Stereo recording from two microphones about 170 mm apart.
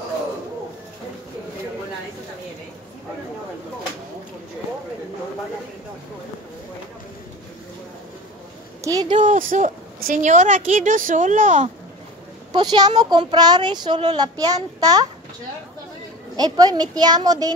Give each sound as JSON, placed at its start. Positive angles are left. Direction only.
{"t": 9.1, "sound": "speech", "side_deg": -50}
{"t": 12.5, "sound": "speech", "side_deg": -25}
{"t": 16.3, "sound": "speech", "side_deg": -20}